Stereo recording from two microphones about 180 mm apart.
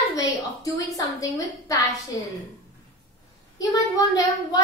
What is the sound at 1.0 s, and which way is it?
Speech, 20° left (ahead or behind).